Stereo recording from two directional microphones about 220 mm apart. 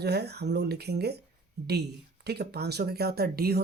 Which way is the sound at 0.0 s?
50° right (ahead or behind).